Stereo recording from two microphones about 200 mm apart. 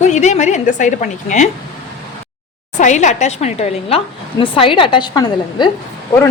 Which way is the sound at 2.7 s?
35° left (ahead or behind).